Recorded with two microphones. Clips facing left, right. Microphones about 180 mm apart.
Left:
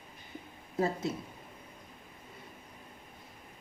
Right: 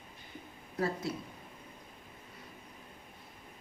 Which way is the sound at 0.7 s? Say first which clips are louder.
Left 3 dB; 20° left (ahead or behind).